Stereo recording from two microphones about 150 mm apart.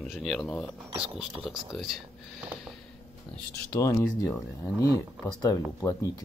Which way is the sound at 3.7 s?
20° left (ahead or behind).